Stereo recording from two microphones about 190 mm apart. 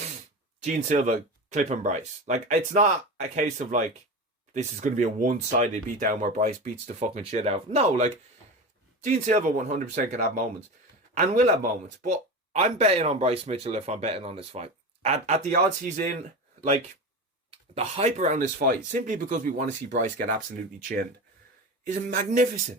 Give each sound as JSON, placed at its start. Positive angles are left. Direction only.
{"t": 0.6, "sound": "speech", "side_deg": -40}
{"t": 16.6, "sound": "speech", "side_deg": -35}
{"t": 21.8, "sound": "speech", "side_deg": -40}